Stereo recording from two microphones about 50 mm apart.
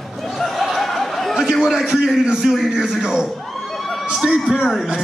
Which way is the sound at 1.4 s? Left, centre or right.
Centre.